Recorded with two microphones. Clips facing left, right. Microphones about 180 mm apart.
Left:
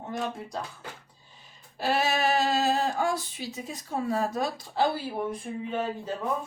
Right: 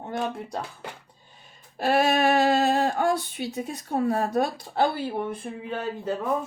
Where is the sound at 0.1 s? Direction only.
60° right (ahead or behind).